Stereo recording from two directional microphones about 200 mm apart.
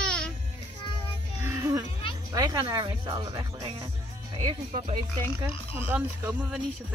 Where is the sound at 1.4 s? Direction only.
15° right (ahead or behind).